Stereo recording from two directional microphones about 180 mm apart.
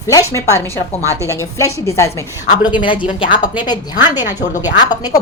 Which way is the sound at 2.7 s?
25° left (ahead or behind).